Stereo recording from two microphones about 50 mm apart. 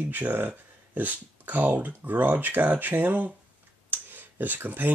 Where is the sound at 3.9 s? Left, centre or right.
Right.